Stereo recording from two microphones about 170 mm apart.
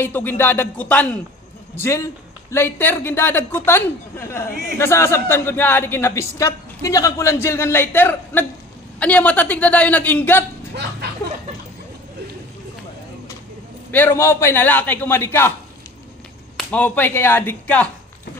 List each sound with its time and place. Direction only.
0.0 s a woman's voice: 10° left (ahead or behind)
10.7 s speech: 70° right (ahead or behind)
13.9 s a woman's voice: 15° left (ahead or behind)
16.5 s a woman's voice: 10° left (ahead or behind)